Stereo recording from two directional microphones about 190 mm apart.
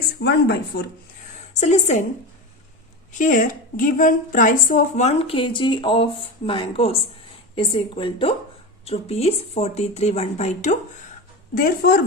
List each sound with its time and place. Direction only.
0.2 s speech: 55° left (ahead or behind)
1.5 s a woman's voice: 35° left (ahead or behind)
3.2 s a woman's voice: 45° left (ahead or behind)
11.5 s speech: 50° left (ahead or behind)